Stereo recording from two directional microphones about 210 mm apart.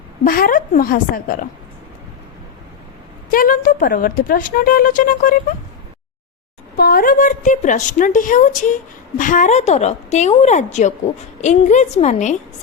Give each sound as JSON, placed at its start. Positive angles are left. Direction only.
{"t": 0.3, "sound": "a woman's voice", "side_deg": 45}
{"t": 3.3, "sound": "speech", "side_deg": 40}
{"t": 6.7, "sound": "speech", "side_deg": 45}